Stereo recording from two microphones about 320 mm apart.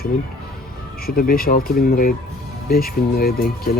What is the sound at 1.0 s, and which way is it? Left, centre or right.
Speech, left.